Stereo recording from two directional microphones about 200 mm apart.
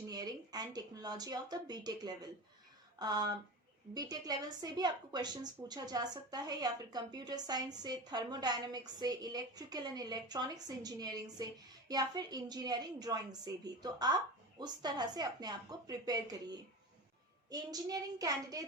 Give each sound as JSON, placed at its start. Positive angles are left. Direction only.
{"t": 0.1, "sound": "a woman's voice", "side_deg": -20}